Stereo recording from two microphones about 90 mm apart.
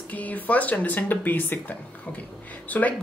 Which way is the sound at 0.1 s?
15° left (ahead or behind).